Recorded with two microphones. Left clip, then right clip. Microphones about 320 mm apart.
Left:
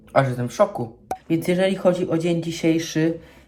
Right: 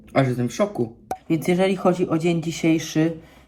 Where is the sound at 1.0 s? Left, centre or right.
Centre.